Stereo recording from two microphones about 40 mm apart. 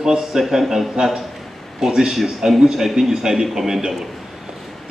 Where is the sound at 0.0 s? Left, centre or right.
Centre.